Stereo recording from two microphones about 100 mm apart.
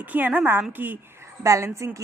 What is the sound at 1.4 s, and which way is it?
Speech, 30° right (ahead or behind).